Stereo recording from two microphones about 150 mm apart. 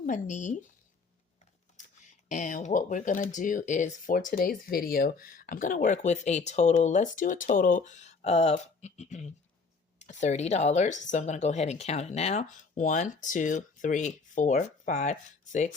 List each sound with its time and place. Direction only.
0.0 s speech: 55° left (ahead or behind)
1.7 s speech: 55° left (ahead or behind)